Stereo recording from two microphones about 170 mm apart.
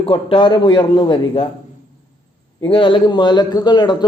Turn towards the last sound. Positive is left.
turn(degrees=25)  # may be behind; listen again after turning